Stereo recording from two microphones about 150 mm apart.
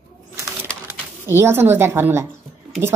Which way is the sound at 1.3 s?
15° right (ahead or behind).